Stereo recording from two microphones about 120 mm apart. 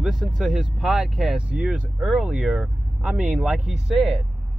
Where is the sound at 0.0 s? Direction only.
5° right (ahead or behind).